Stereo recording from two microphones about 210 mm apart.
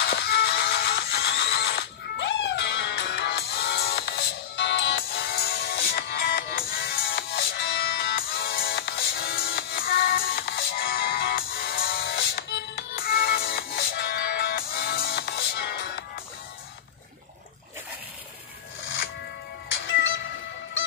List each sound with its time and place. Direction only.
0.0 s music: 50° left (ahead or behind)
19.7 s music: 65° left (ahead or behind)